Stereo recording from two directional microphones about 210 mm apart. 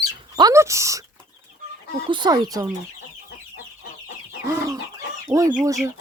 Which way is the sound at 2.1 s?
20° right (ahead or behind).